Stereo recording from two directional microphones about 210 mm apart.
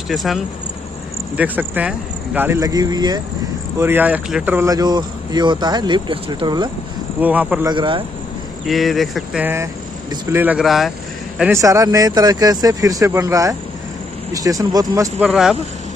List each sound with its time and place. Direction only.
0.1 s speech: centre (ahead or behind); by 3.2 s 20° right (ahead or behind)
3.8 s speech: 10° right (ahead or behind)
7.2 s speech: 5° right (ahead or behind)
7.7 s speech: 25° right (ahead or behind)
8.6 s speech: centre (ahead or behind)